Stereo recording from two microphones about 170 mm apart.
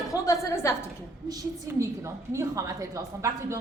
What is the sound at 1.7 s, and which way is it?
A woman's voice, 15° right (ahead or behind).